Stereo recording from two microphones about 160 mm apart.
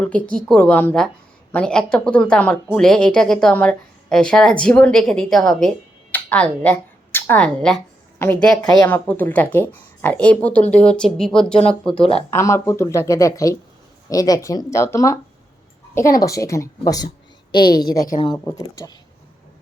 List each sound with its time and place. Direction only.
0.0 s a woman's voice: 5° left (ahead or behind)
12.3 s a woman's voice: 15° left (ahead or behind)